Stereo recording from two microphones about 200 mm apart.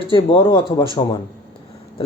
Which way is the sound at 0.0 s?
25° left (ahead or behind).